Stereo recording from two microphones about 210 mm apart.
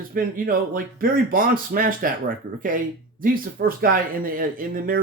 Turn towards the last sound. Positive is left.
turn(degrees=-40)  # may be behind; listen again after turning